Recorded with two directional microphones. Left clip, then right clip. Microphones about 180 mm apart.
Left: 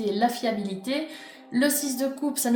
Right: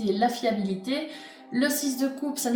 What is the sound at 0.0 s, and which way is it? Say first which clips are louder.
Speech: even; 45° left (ahead or behind).